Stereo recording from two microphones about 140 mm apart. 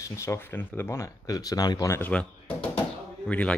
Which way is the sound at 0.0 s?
20° left (ahead or behind).